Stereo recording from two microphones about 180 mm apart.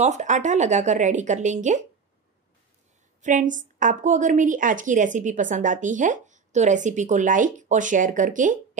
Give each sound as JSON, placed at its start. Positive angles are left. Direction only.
{"t": 0.0, "sound": "a woman's voice", "side_deg": -40}
{"t": 3.2, "sound": "a woman's voice", "side_deg": -45}